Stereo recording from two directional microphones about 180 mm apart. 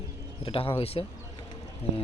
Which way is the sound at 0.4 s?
30° left (ahead or behind).